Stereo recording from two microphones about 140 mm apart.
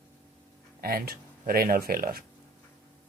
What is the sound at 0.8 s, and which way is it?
Speech, 90° right.